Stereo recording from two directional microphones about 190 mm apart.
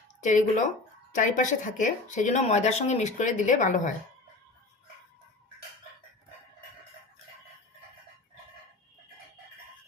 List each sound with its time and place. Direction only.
0.2 s speech: 40° left (ahead or behind)